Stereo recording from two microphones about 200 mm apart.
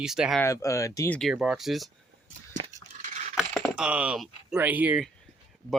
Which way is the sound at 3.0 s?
35° right (ahead or behind).